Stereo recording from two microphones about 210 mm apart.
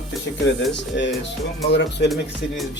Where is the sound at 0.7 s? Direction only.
60° left (ahead or behind).